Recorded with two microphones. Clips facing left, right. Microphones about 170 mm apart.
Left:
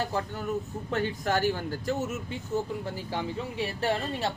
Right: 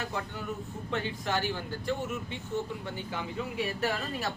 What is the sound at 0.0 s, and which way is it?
Speech, 35° left (ahead or behind).